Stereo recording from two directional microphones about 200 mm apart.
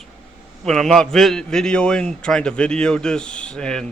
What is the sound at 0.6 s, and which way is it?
A man's voice, centre (ahead or behind).